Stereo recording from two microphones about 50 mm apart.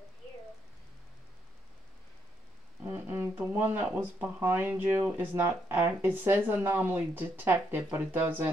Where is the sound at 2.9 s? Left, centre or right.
Right.